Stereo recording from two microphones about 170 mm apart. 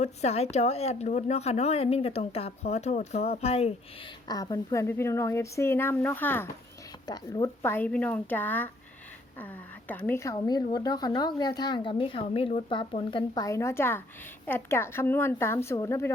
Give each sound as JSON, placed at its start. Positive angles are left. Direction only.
{"t": 0.0, "sound": "speech", "side_deg": 40}
{"t": 4.3, "sound": "speech", "side_deg": 25}
{"t": 9.9, "sound": "speech", "side_deg": 10}